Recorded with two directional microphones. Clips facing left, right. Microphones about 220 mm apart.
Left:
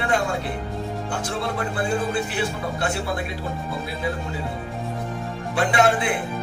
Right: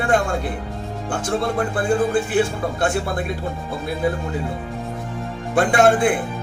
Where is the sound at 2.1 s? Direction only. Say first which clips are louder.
Right 6 dB; 50° right (ahead or behind).